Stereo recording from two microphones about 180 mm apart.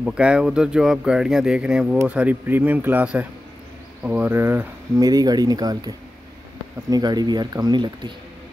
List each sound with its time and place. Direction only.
0.0 s speech: 5° right (ahead or behind); by 8.1 s 25° right (ahead or behind)